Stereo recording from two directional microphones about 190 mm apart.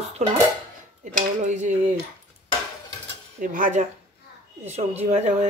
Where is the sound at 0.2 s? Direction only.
35° right (ahead or behind).